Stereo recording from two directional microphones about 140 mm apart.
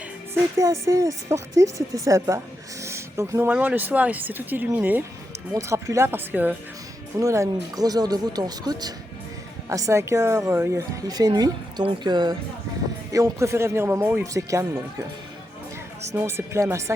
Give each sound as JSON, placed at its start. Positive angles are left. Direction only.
{"t": 0.6, "sound": "speech", "side_deg": -20}
{"t": 2.8, "sound": "a sound", "side_deg": -20}
{"t": 3.5, "sound": "a woman's voice", "side_deg": -10}
{"t": 16.1, "sound": "speech", "side_deg": -20}